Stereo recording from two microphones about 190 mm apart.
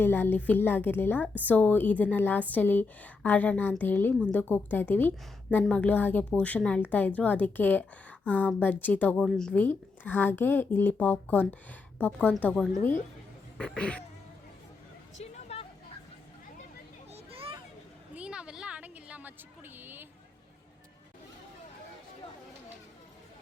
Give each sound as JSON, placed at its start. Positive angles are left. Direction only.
{"t": 0.0, "sound": "a woman's voice", "side_deg": 10}
{"t": 15.2, "sound": "music", "side_deg": 30}
{"t": 17.1, "sound": "children playing", "side_deg": -30}
{"t": 18.1, "sound": "a sound", "side_deg": -5}